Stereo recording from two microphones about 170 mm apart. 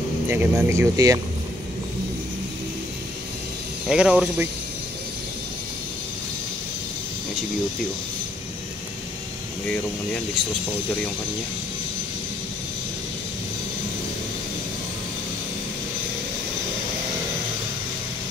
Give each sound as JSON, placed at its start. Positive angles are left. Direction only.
{"t": 0.3, "sound": "speech", "side_deg": -15}
{"t": 3.8, "sound": "speech", "side_deg": -5}